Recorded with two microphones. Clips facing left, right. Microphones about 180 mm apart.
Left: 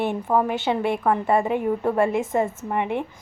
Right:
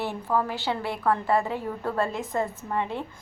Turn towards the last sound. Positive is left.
turn(degrees=20)  # may be behind; listen again after turning